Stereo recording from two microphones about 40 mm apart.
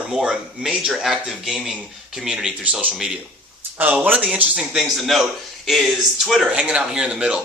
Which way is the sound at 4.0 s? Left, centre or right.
Right.